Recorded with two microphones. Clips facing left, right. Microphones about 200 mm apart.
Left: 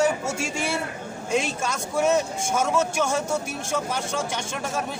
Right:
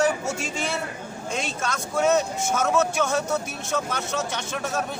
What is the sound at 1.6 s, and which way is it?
Speech, 10° left (ahead or behind).